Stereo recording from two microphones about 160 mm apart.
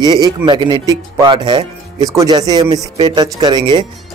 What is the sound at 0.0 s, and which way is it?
Speech, 25° right (ahead or behind).